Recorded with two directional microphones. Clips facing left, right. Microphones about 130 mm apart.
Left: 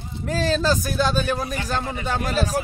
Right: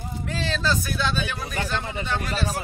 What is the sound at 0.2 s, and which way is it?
Speech, 40° left (ahead or behind).